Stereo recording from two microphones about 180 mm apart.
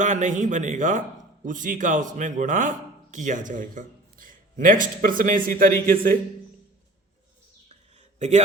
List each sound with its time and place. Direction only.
0.0 s a man's voice: 45° right (ahead or behind)